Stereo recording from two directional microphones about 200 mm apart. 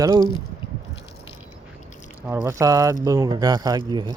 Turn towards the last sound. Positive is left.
turn(degrees=-20)  # may be behind; listen again after turning